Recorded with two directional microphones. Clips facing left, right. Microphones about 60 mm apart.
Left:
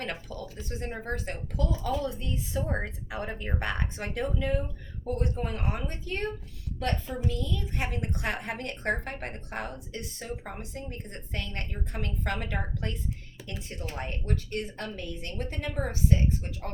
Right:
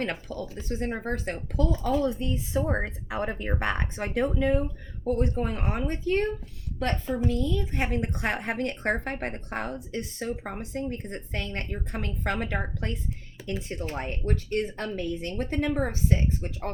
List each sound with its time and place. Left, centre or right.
0.0 s speech: right